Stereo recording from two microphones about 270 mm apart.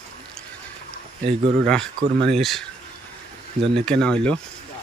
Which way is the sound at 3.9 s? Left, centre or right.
Centre.